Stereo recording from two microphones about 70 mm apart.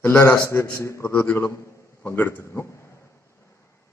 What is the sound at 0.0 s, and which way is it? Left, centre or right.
Speech, left.